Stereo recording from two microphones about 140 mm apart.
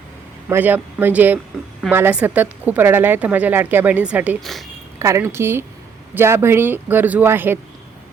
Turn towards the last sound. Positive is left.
turn(degrees=-15)  # may be behind; listen again after turning